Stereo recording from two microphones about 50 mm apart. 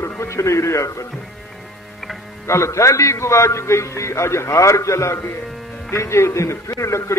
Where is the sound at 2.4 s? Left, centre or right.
Left.